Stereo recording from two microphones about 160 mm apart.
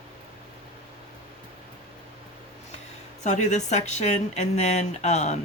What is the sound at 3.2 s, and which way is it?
Speech, 45° left (ahead or behind).